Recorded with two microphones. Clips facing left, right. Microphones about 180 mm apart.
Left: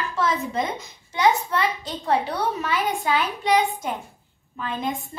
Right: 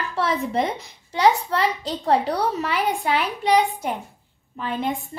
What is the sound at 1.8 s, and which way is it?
A woman's voice, 35° right (ahead or behind).